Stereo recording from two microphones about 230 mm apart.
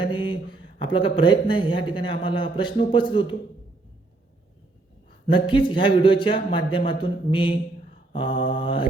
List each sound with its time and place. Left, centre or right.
0.0 s speech: left
5.2 s speech: left